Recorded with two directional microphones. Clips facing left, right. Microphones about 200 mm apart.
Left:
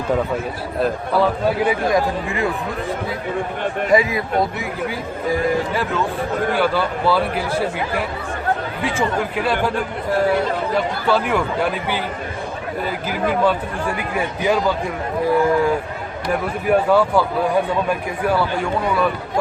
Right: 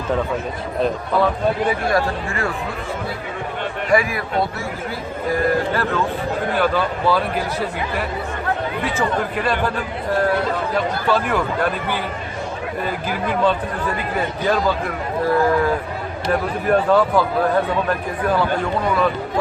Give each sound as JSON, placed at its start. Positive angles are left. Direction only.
{"t": 0.8, "sound": "a man's voice", "side_deg": 5}
{"t": 3.9, "sound": "speech", "side_deg": 20}
{"t": 5.3, "sound": "a man's voice", "side_deg": 15}
{"t": 8.8, "sound": "a man's voice", "side_deg": 10}
{"t": 10.2, "sound": "chatter", "side_deg": 10}
{"t": 11.1, "sound": "a man's voice", "side_deg": 10}
{"t": 13.4, "sound": "a man's voice", "side_deg": 10}